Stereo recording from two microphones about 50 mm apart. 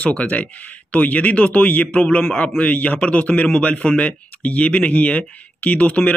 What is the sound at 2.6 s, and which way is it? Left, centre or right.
Speech, left.